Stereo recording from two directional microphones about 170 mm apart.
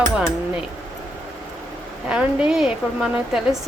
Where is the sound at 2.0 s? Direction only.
5° right (ahead or behind).